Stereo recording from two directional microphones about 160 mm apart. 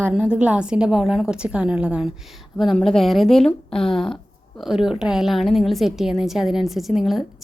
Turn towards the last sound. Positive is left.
turn(degrees=0)  # may be behind; listen again after turning